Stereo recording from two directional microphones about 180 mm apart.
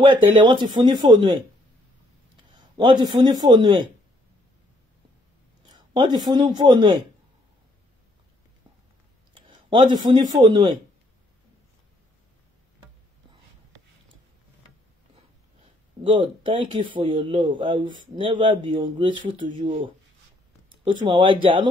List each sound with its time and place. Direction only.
0.0 s speech: 25° right (ahead or behind)
2.8 s speech: 25° right (ahead or behind)
5.7 s a man's voice: 25° right (ahead or behind)
9.7 s a man's voice: 25° right (ahead or behind)
16.0 s speech: 25° right (ahead or behind)